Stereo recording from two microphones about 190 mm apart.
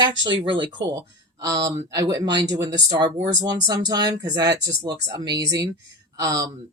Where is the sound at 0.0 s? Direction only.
25° right (ahead or behind).